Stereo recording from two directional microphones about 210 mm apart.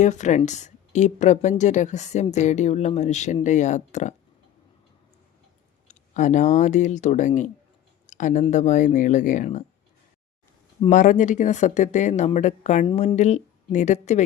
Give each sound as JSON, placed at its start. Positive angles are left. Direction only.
{"t": 0.0, "sound": "speech", "side_deg": 35}
{"t": 5.9, "sound": "speech", "side_deg": 35}
{"t": 10.8, "sound": "speech", "side_deg": 35}